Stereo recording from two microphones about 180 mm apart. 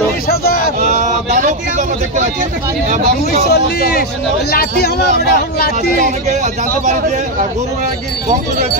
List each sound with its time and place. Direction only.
0.3 s a sound: 55° left (ahead or behind)
0.7 s vehicle: 40° right (ahead or behind)
3.4 s speech: 60° left (ahead or behind)
5.9 s speech: 40° right (ahead or behind)